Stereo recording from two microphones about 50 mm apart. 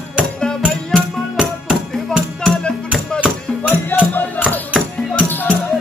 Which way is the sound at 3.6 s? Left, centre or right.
Left.